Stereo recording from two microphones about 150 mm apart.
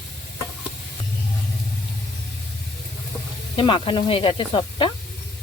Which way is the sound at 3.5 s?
35° left (ahead or behind).